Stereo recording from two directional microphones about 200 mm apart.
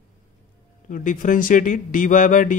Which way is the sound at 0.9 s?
40° left (ahead or behind).